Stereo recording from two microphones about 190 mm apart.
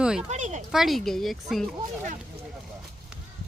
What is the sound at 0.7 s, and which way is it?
Speech, centre (ahead or behind).